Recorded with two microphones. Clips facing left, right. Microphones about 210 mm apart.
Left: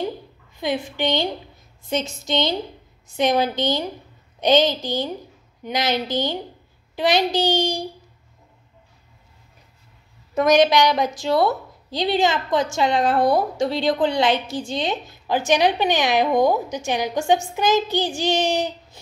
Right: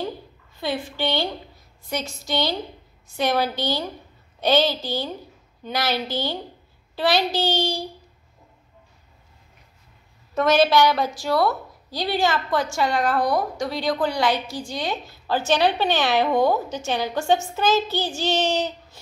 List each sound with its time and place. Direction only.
0.6 s a child's voice: 15° left (ahead or behind)
10.3 s a woman's voice: 15° left (ahead or behind)